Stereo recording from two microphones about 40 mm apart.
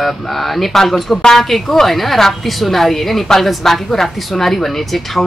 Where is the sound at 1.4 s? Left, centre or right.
Centre.